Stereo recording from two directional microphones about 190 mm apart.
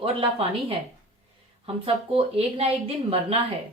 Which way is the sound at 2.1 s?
30° right (ahead or behind).